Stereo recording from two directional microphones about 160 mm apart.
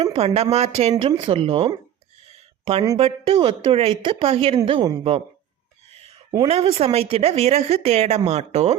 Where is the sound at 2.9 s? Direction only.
35° right (ahead or behind).